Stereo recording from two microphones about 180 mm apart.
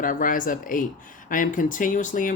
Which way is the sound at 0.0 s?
50° left (ahead or behind).